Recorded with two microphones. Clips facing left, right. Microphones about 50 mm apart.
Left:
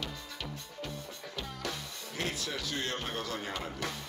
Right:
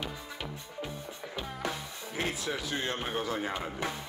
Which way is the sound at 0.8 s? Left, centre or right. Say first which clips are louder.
Left 1 dB; centre.